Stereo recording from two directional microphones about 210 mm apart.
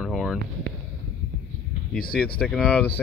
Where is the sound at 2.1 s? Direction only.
5° left (ahead or behind).